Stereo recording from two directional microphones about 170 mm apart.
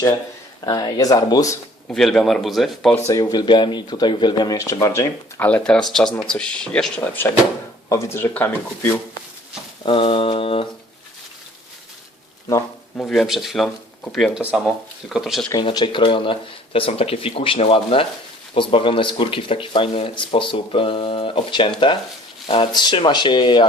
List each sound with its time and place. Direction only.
0.6 s speech: 20° left (ahead or behind)
1.9 s speech: 5° left (ahead or behind)
3.1 s speech: 20° left (ahead or behind)
9.8 s speech: 30° left (ahead or behind)
13.0 s speech: centre (ahead or behind)
15.5 s speech: 25° left (ahead or behind)